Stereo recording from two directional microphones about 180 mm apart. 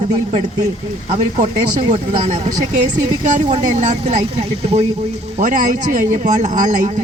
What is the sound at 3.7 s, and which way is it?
Speech, 40° right (ahead or behind).